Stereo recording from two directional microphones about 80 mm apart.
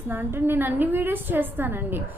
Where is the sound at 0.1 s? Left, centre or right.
Right.